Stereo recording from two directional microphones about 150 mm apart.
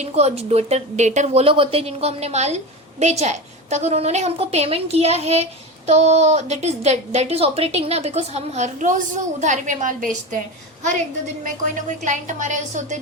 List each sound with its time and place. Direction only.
0.0 s a woman's voice: 45° right (ahead or behind)
11.4 s a woman's voice: 55° right (ahead or behind)